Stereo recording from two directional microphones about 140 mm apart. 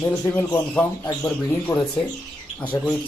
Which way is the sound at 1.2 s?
15° left (ahead or behind).